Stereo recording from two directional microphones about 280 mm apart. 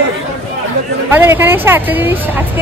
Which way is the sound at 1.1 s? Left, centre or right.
Centre.